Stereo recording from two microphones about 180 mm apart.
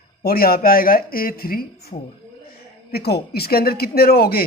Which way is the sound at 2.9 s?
60° left (ahead or behind).